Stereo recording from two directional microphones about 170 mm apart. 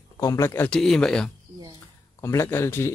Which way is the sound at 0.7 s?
5° left (ahead or behind).